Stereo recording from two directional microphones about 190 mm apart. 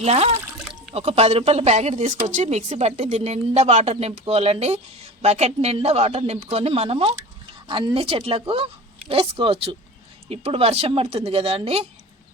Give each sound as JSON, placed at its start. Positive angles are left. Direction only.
{"t": 0.0, "sound": "a woman's voice", "side_deg": -35}